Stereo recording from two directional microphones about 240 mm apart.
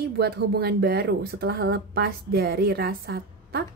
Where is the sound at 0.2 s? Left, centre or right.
Right.